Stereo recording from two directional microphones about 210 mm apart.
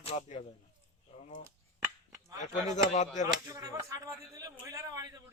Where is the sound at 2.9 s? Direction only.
35° left (ahead or behind).